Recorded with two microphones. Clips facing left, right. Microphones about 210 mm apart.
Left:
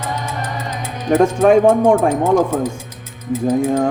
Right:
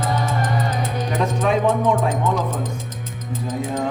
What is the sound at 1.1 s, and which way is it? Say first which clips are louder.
Speech: left 10 dB; 50° left (ahead or behind).